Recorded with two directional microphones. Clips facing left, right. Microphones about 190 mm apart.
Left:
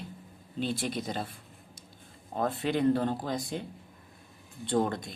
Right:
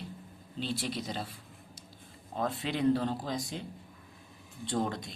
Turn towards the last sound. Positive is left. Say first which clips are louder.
# left 4 dB
turn(degrees=55)  # may be behind; listen again after turning